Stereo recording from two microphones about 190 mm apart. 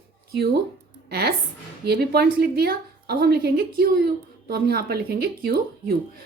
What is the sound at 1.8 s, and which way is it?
A woman's voice, 60° right (ahead or behind).